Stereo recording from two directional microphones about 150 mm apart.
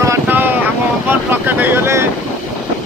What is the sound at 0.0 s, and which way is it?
Boat, 15° right (ahead or behind).